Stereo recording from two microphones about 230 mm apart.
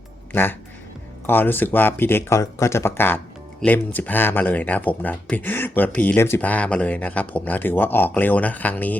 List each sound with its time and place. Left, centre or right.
0.3 s speech: centre